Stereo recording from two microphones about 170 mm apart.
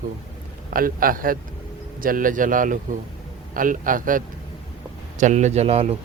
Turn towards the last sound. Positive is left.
turn(degrees=-40)  # may be behind; listen again after turning